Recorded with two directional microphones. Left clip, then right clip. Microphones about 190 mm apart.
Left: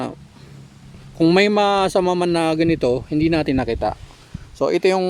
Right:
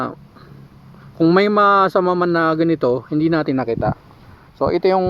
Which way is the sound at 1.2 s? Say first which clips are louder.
Right 2 dB; 10° left (ahead or behind).